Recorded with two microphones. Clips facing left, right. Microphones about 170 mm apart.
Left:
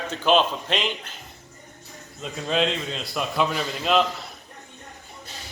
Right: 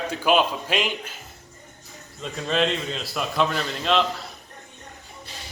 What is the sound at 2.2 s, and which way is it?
A man's voice, centre (ahead or behind).